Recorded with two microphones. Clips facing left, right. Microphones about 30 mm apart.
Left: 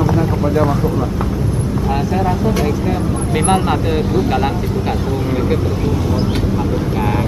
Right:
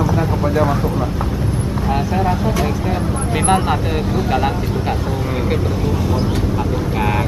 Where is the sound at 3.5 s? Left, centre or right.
Centre.